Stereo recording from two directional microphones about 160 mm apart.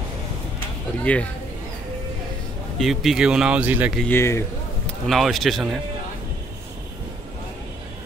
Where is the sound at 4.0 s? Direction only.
15° left (ahead or behind).